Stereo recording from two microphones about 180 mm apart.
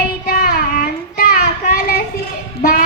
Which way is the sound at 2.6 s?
50° left (ahead or behind).